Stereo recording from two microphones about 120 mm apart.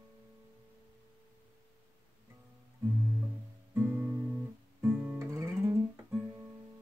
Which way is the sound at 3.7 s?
20° right (ahead or behind).